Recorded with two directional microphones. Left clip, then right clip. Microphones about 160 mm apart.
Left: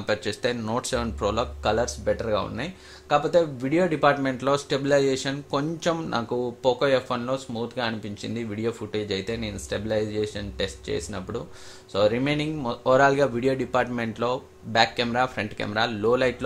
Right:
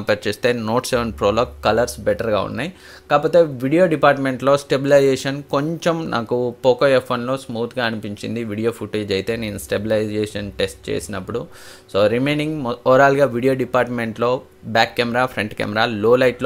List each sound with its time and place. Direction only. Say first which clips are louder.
0.0 s speech: right 7 dB; 30° right (ahead or behind)